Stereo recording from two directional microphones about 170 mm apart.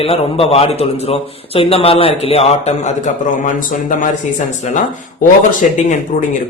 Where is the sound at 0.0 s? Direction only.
35° left (ahead or behind).